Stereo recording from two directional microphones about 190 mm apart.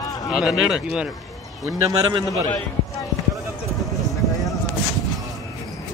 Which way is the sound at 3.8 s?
Centre (ahead or behind).